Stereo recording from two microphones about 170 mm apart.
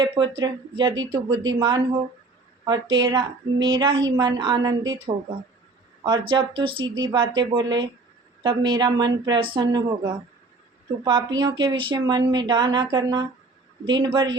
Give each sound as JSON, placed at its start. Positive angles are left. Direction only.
{"t": 0.0, "sound": "a woman's voice", "side_deg": -25}